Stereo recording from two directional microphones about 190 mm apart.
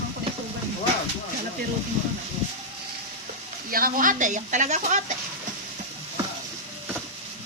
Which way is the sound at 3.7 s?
50° right (ahead or behind).